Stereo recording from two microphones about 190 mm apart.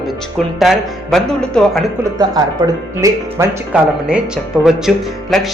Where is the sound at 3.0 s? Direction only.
15° right (ahead or behind).